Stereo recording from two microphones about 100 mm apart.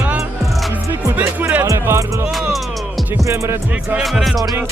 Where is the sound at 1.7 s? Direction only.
30° right (ahead or behind).